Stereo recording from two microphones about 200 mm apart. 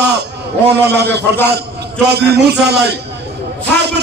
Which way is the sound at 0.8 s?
55° right (ahead or behind).